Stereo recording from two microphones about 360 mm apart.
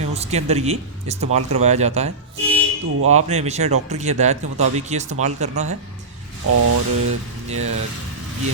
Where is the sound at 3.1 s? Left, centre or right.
Centre.